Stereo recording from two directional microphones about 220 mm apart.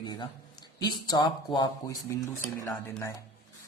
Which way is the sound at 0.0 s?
20° left (ahead or behind).